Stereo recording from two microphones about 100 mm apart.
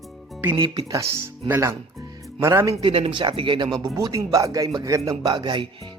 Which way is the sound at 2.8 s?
60° right (ahead or behind).